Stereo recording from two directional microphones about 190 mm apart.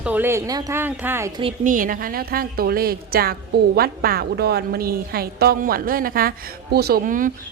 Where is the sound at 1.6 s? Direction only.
45° right (ahead or behind).